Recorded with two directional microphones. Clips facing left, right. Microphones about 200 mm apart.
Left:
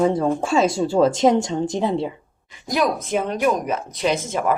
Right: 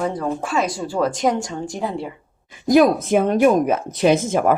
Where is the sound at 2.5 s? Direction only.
50° right (ahead or behind).